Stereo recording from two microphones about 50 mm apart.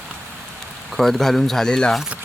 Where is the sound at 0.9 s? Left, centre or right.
Centre.